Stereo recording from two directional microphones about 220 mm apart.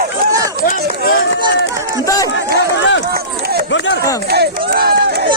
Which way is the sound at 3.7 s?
55° left (ahead or behind).